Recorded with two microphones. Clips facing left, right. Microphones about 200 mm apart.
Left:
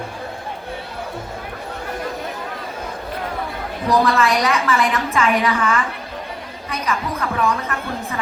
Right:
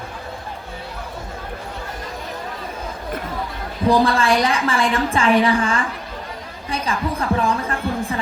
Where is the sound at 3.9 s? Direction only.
30° right (ahead or behind).